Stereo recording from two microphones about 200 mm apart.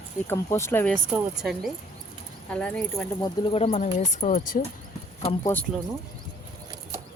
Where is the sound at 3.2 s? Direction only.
25° left (ahead or behind); by 4.6 s 40° left (ahead or behind).